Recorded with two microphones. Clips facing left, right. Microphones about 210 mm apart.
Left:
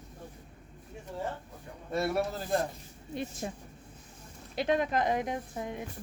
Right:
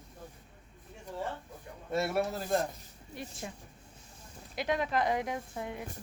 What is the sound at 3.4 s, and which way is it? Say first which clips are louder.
Speech: left 5 dB; 35° left (ahead or behind).